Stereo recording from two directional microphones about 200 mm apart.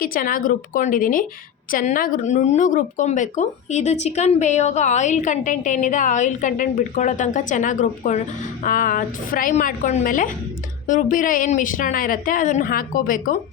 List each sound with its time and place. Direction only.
0.0 s a woman's voice: 45° left (ahead or behind)